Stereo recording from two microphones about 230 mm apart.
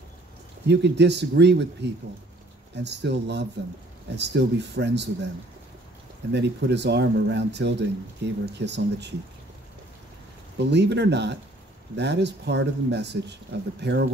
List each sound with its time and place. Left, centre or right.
0.7 s speech: right
6.3 s speech: right
10.7 s speech: right